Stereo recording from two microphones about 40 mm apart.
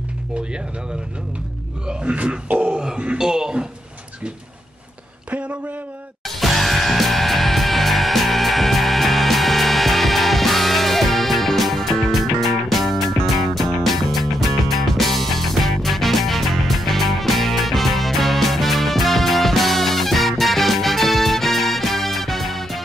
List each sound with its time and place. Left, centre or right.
1.9 s grunt: right
2.6 s grunt: centre
3.2 s a man's voice: centre
5.3 s a man's voice: right
6.2 s music: centre